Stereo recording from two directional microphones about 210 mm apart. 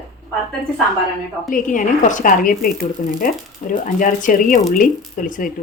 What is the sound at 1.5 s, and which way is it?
Speech, 40° left (ahead or behind).